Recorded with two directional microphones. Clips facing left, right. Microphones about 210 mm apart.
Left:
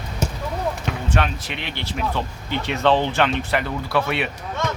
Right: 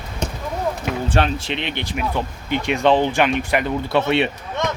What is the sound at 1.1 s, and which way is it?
Speech, 30° right (ahead or behind).